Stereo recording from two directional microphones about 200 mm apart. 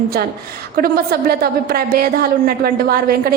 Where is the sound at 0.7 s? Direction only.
50° right (ahead or behind).